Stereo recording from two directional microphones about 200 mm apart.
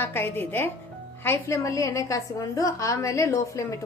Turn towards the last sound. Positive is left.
turn(degrees=15)  # may be behind; listen again after turning